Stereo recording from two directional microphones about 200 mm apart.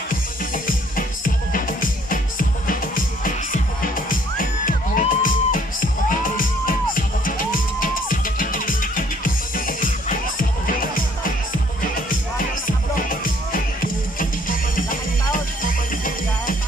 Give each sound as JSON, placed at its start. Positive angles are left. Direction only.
{"t": 0.7, "sound": "music", "side_deg": 45}
{"t": 4.1, "sound": "music", "side_deg": 45}
{"t": 15.6, "sound": "music", "side_deg": 45}